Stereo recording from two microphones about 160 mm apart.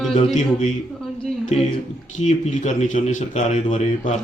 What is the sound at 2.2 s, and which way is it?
A man's voice, 50° left (ahead or behind).